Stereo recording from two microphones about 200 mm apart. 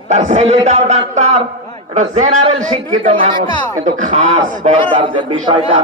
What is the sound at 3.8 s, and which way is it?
Speech, 40° right (ahead or behind).